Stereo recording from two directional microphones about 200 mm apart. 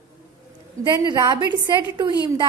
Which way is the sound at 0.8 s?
20° right (ahead or behind).